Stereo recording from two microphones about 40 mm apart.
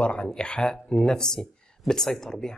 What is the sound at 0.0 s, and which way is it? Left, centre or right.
Speech, left.